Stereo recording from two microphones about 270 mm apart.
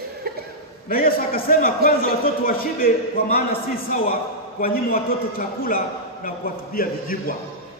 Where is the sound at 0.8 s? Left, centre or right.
Left.